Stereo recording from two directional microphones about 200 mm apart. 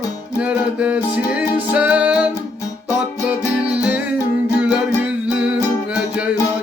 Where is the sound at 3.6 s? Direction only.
5° right (ahead or behind).